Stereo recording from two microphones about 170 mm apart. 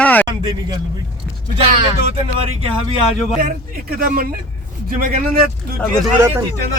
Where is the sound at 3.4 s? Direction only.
55° right (ahead or behind).